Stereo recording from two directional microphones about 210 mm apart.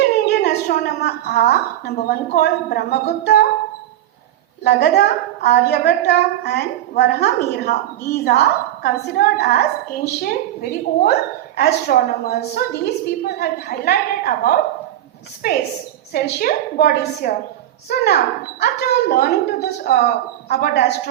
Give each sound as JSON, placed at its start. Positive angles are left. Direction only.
{"t": 0.3, "sound": "a woman's voice", "side_deg": 50}
{"t": 4.6, "sound": "a woman's voice", "side_deg": 50}
{"t": 16.1, "sound": "a woman's voice", "side_deg": 45}